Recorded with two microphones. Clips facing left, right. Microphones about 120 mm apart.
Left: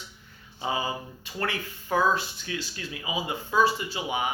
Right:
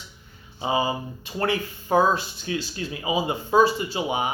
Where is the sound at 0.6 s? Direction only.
20° right (ahead or behind).